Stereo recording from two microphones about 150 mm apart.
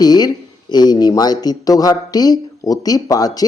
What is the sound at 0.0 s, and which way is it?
Speech, 25° left (ahead or behind).